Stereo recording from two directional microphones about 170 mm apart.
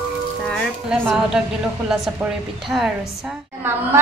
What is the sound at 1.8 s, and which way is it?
A woman's voice, 5° right (ahead or behind).